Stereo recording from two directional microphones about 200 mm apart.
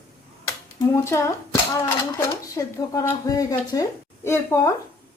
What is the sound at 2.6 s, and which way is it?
A woman's voice, 15° left (ahead or behind).